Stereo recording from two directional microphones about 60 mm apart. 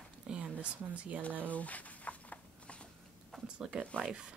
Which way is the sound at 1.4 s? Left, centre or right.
Left.